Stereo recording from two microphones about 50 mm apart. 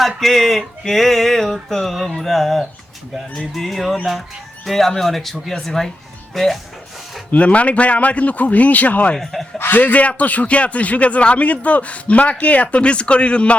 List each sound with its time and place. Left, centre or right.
0.2 s music: centre
5.5 s speech: centre
6.3 s music: centre
7.3 s a man's voice: left
9.1 s music: centre
9.6 s a man's voice: left